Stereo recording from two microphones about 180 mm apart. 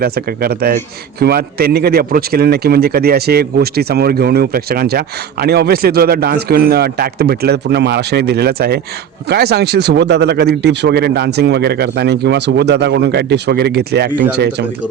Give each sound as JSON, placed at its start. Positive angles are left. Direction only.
{"t": 0.0, "sound": "a man's voice", "side_deg": -55}